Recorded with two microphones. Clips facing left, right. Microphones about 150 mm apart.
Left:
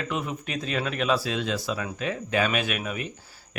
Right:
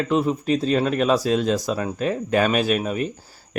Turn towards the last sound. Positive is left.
turn(degrees=-35)  # may be behind; listen again after turning